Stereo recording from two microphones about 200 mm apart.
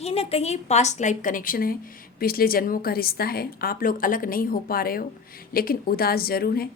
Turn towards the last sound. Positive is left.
turn(degrees=50)  # may be behind; listen again after turning